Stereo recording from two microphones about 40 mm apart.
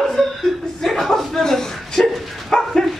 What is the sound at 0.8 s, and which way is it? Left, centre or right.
Chuckle, centre.